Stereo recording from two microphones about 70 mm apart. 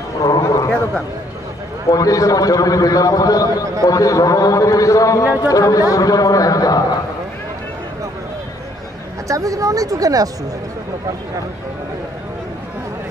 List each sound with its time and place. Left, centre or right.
0.2 s a sound: left
1.9 s a man's voice: left
9.3 s a woman's voice: right